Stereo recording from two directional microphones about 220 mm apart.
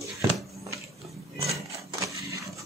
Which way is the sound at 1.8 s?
15° right (ahead or behind).